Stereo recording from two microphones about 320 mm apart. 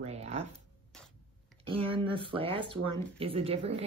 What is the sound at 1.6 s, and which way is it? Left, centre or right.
Speech, centre.